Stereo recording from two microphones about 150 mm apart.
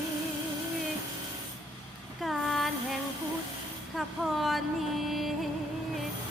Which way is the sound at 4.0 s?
Centre (ahead or behind).